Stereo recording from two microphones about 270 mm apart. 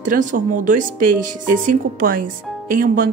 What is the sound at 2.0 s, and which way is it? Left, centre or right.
Speech, right.